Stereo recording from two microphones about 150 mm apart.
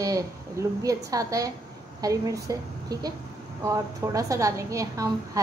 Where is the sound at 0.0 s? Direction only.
25° right (ahead or behind).